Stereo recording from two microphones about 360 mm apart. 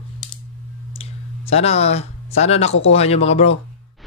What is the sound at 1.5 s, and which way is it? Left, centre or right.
Speech, centre.